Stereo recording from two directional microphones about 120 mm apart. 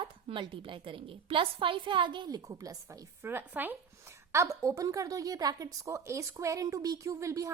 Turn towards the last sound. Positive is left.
turn(degrees=-25)  # may be behind; listen again after turning